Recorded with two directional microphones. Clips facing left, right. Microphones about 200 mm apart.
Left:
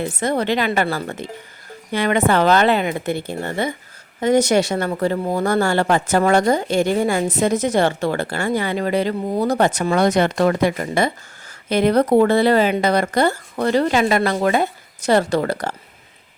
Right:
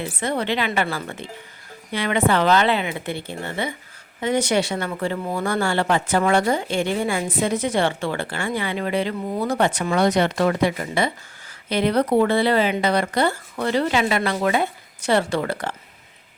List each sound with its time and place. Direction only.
0.0 s speech: 40° left (ahead or behind)